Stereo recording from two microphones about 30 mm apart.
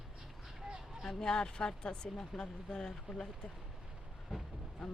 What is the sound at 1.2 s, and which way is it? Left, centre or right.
Speech, left.